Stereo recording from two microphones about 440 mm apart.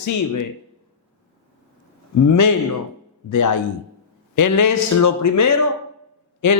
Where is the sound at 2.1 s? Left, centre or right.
Left.